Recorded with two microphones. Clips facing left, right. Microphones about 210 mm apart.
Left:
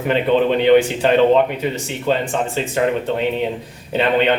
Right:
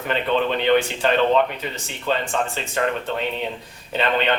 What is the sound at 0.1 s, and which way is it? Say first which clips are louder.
A woman's voice: left 6 dB; 15° left (ahead or behind).